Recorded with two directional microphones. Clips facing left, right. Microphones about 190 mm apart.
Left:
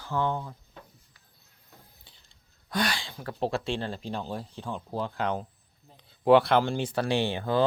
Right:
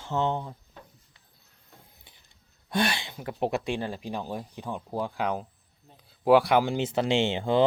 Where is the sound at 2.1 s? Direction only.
20° right (ahead or behind).